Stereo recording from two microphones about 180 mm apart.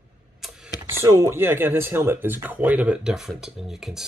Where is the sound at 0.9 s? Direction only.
15° right (ahead or behind).